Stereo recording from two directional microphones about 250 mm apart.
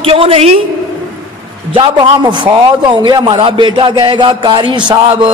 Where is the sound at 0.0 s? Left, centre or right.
Right.